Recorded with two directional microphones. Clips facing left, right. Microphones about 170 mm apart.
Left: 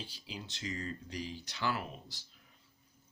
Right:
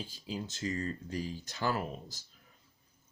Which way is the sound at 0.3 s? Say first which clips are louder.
Right 7 dB; 45° right (ahead or behind).